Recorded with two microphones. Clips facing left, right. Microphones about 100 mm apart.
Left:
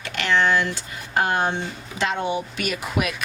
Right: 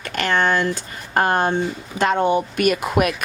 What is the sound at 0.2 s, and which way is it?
A woman's voice, 45° right (ahead or behind).